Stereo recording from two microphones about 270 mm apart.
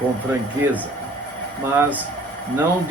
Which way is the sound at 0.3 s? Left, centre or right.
Centre.